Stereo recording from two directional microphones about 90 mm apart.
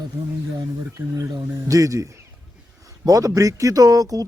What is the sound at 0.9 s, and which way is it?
Speech, 40° right (ahead or behind).